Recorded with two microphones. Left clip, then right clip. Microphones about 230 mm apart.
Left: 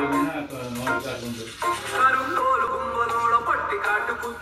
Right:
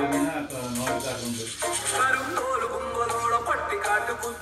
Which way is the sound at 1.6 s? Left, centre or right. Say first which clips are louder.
Left 5 dB; left.